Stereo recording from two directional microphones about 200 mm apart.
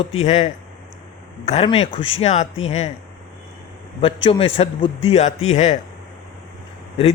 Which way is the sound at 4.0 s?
25° left (ahead or behind).